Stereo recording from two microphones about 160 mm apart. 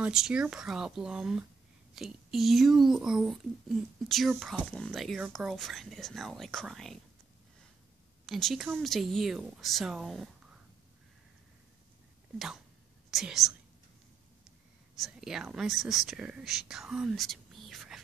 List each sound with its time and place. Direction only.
0.0 s a child's voice: 5° right (ahead or behind)
8.3 s a child's voice: centre (ahead or behind)
13.1 s a child's voice: centre (ahead or behind)
15.0 s speech: centre (ahead or behind)